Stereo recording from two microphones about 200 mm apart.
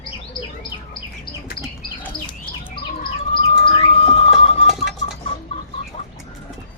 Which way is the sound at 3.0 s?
25° left (ahead or behind).